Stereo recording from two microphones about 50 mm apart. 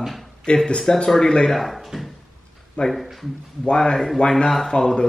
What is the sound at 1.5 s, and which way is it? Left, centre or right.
Speech, centre.